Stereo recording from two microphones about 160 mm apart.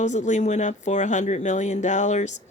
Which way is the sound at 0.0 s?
50° left (ahead or behind).